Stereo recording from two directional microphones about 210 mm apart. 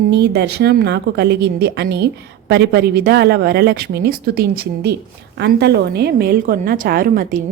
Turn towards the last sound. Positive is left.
turn(degrees=-40)  # may be behind; listen again after turning